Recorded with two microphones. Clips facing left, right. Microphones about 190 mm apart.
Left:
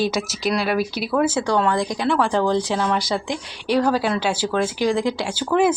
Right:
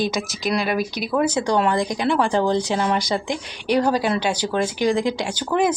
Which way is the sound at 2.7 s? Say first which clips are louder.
Even; 5° right (ahead or behind).